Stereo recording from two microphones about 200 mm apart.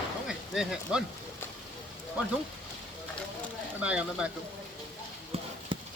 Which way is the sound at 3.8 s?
5° right (ahead or behind).